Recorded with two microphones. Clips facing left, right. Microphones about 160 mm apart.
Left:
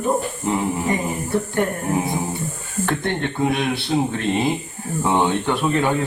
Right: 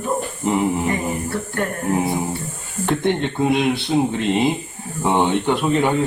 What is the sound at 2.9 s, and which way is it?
Speech, 20° right (ahead or behind).